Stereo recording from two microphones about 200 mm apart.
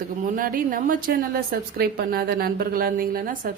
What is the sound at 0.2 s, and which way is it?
A woman's voice, 45° right (ahead or behind).